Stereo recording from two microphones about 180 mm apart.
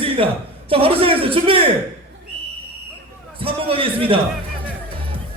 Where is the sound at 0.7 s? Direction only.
30° right (ahead or behind).